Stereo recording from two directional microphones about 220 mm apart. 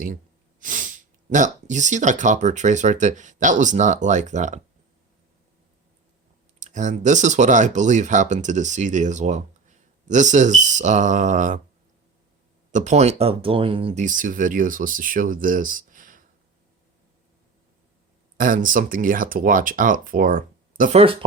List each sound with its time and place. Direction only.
0.6 s speech: 35° right (ahead or behind)
6.6 s speech: 35° right (ahead or behind)
12.7 s speech: 30° right (ahead or behind)
18.3 s speech: 40° right (ahead or behind)
21.0 s speech: 25° right (ahead or behind)